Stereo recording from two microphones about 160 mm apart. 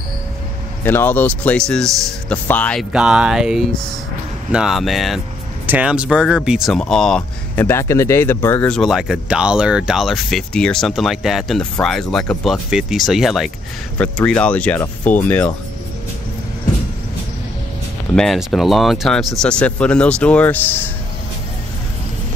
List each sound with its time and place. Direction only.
0.8 s speech: 10° left (ahead or behind)
2.9 s speech: 5° right (ahead or behind)
7.6 s speech: 15° left (ahead or behind)
18.1 s speech: centre (ahead or behind)